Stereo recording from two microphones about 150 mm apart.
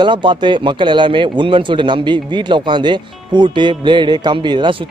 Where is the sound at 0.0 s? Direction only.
30° right (ahead or behind).